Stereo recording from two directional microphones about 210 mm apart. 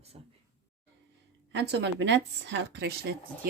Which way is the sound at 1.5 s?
55° right (ahead or behind).